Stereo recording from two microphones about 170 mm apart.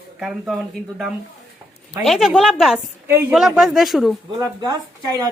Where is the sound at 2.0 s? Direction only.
Centre (ahead or behind).